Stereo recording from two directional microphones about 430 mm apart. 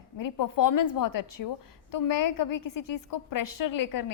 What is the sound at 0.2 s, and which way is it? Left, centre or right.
A woman's voice, left.